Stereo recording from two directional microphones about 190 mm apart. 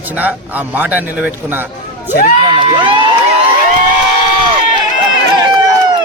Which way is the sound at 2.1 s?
50° left (ahead or behind).